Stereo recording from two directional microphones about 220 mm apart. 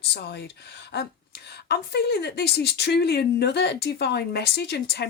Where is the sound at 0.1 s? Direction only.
50° left (ahead or behind).